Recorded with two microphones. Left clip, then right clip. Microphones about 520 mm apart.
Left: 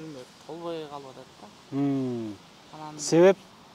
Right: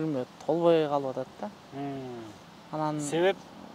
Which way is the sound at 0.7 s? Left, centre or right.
Right.